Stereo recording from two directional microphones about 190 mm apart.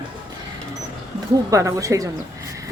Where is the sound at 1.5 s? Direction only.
15° right (ahead or behind).